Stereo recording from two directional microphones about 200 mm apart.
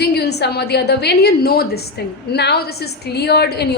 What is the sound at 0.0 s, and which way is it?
A woman's voice, 55° left (ahead or behind).